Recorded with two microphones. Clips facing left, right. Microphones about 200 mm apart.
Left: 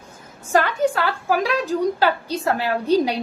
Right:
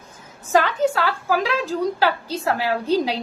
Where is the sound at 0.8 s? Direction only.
15° left (ahead or behind).